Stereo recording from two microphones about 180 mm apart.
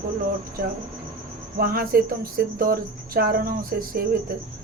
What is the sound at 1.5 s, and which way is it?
Speech, 55° right (ahead or behind).